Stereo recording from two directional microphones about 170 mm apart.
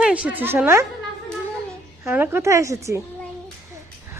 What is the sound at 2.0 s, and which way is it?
Speech, 10° right (ahead or behind).